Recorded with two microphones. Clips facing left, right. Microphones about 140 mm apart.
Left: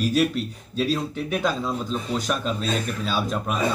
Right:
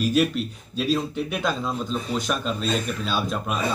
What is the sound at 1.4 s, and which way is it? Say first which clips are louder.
Speech: left 1 dB; 5° left (ahead or behind).